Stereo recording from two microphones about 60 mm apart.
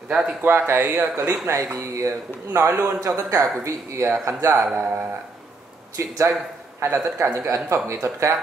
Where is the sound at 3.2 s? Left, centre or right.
Right.